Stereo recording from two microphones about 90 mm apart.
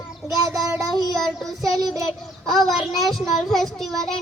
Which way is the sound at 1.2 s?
Centre (ahead or behind).